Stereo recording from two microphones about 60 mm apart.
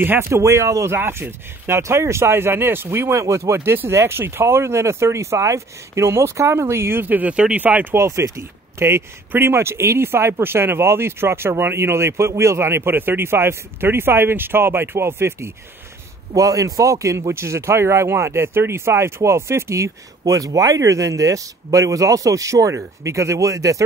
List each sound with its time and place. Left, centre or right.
0.0 s speech: right
0.3 s a man's voice: right
0.9 s speech: right
1.7 s speech: right
7.0 s speech: right
7.3 s speech: centre
7.6 s speech: right
7.9 s speech: right
16.3 s a man's voice: right